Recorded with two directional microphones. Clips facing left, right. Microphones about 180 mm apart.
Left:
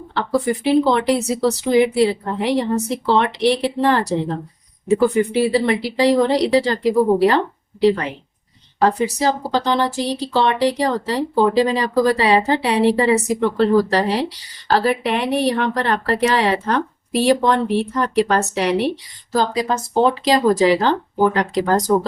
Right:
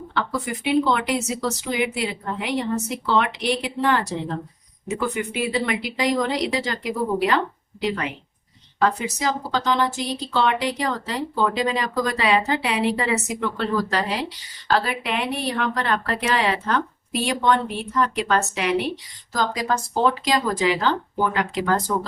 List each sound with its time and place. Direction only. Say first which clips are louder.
0.1 s speech: left 8 dB; 35° left (ahead or behind); by 20.1 s 20° left (ahead or behind)
20.2 s speech: left 7 dB; 35° left (ahead or behind)